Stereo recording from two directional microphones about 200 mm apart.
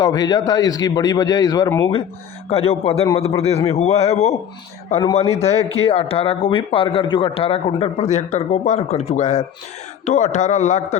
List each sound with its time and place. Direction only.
0.0 s a man's voice: 20° left (ahead or behind)
2.5 s speech: 30° left (ahead or behind)